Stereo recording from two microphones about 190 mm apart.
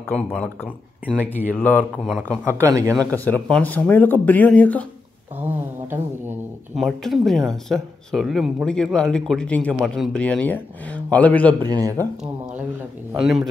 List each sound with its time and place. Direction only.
0.1 s a man's voice: 5° left (ahead or behind)
2.4 s speech: 15° right (ahead or behind)
3.3 s a man's voice: 5° left (ahead or behind)
5.9 s a man's voice: 5° right (ahead or behind); by 11.5 s 10° left (ahead or behind)
11.6 s speech: 20° right (ahead or behind)
13.1 s speech: 5° right (ahead or behind)